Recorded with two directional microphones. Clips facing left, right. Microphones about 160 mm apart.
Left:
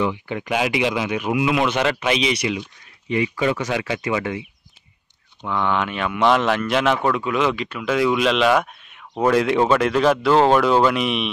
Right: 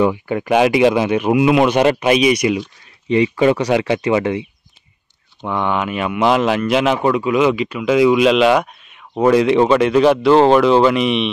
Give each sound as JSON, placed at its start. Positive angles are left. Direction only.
{"t": 0.0, "sound": "speech", "side_deg": -45}
{"t": 1.4, "sound": "speech", "side_deg": -30}
{"t": 2.0, "sound": "speech", "side_deg": -15}
{"t": 5.8, "sound": "speech", "side_deg": -5}